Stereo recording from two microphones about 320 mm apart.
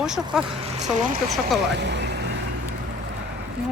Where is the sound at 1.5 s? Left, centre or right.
Right.